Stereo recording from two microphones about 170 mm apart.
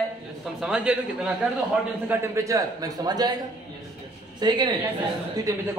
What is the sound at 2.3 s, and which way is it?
A man's voice, 20° right (ahead or behind).